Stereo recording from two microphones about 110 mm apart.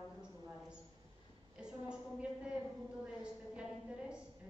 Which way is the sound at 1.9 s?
10° right (ahead or behind).